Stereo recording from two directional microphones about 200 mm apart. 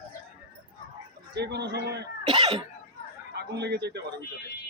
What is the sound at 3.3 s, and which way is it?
Speech, 55° right (ahead or behind).